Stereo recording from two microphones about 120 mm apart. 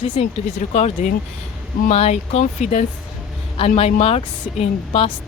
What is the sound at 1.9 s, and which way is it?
Speech, 60° left (ahead or behind).